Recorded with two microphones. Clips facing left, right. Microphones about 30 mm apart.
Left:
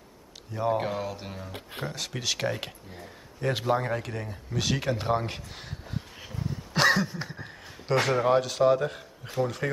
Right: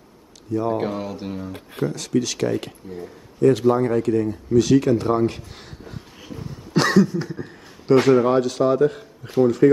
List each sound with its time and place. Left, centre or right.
0.5 s speech: centre
0.7 s a man's voice: centre
2.0 s speech: centre
5.9 s a sound: centre
7.0 s speech: centre
7.9 s a man's voice: centre